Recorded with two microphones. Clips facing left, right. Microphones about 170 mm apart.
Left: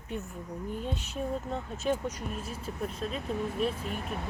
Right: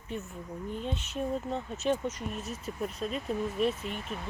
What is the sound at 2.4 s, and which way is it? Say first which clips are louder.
Speech: right 1 dB; 30° left (ahead or behind).